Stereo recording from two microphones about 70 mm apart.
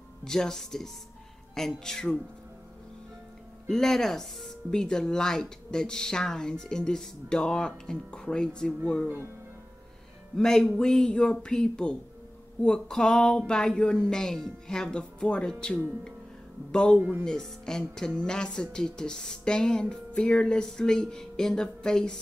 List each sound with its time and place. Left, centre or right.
0.2 s speech: centre
3.6 s speech: centre
9.0 s speech: right
10.3 s speech: centre
16.7 s speech: centre